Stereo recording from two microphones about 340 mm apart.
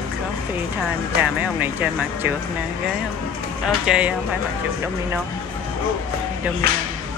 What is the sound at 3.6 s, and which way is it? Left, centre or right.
Speech, centre.